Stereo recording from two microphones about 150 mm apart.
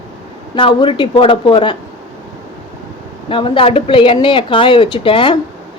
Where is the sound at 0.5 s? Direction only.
35° left (ahead or behind).